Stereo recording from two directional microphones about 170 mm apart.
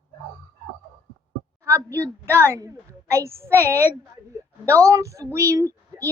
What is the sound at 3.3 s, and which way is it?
A child's voice, 15° right (ahead or behind).